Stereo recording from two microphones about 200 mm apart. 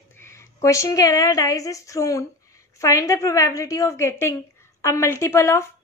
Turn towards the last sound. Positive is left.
turn(degrees=15)  # may be behind; listen again after turning